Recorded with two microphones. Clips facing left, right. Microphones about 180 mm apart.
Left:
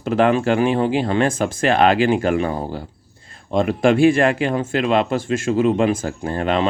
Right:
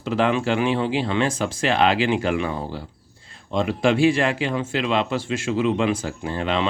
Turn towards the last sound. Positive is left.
turn(degrees=50)  # may be behind; listen again after turning